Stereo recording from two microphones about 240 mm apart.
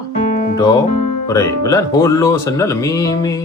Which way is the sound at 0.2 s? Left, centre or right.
Left.